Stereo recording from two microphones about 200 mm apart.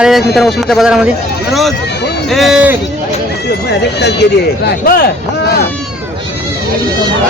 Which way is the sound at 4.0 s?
55° left (ahead or behind).